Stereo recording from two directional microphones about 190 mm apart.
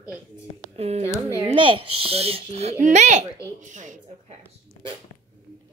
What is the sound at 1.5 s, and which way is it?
Speech, 25° right (ahead or behind).